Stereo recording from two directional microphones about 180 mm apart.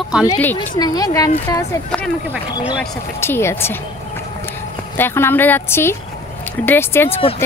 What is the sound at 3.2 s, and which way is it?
Speech, 15° left (ahead or behind).